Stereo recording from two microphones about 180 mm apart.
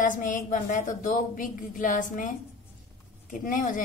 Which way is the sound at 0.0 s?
45° left (ahead or behind).